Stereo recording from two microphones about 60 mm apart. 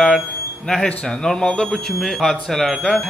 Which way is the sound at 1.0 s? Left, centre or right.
Centre.